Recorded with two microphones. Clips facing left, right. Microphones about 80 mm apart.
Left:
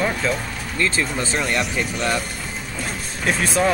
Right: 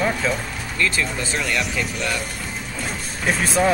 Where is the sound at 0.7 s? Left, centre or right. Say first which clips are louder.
Left 1 dB; left.